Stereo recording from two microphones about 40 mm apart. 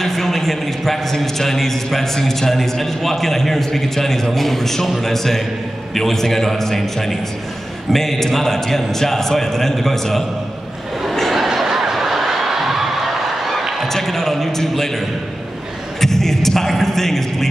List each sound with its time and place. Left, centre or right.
0.0 s a man's voice: centre
11.3 s a sound: centre
13.8 s a man's voice: centre